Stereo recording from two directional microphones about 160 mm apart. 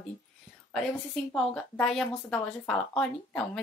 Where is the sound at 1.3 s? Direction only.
5° left (ahead or behind).